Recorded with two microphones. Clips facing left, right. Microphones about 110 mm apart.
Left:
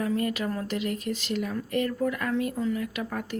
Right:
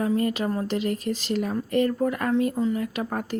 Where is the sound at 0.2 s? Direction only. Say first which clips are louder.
Right 4 dB; 30° right (ahead or behind).